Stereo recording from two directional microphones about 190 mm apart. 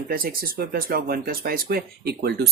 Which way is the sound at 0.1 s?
50° right (ahead or behind).